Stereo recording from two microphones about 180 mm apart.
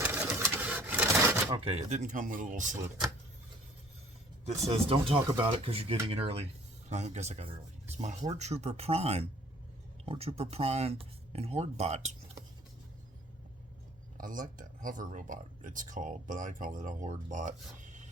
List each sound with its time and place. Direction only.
0.0 s printer: 10° right (ahead or behind)
1.5 s speech: 30° right (ahead or behind); by 2.7 s 45° right (ahead or behind)
4.4 s speech: 35° right (ahead or behind)
14.2 s speech: 50° right (ahead or behind)